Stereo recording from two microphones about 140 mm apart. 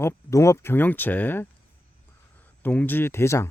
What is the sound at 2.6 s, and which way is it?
Speech, 10° left (ahead or behind).